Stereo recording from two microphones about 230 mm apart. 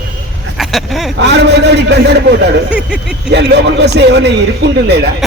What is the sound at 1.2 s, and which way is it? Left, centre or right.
Speech, right.